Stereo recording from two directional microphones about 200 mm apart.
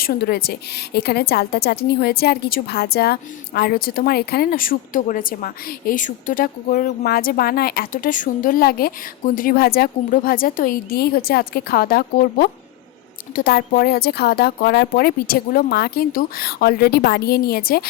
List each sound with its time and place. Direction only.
0.0 s a woman's voice: 50° left (ahead or behind)